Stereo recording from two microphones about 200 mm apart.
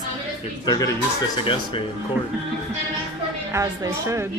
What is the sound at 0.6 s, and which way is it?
Speech, 20° left (ahead or behind).